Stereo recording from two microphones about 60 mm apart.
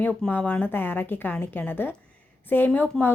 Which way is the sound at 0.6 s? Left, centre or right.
Left.